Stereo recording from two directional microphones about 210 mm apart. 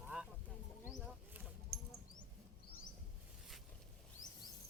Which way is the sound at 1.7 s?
45° right (ahead or behind).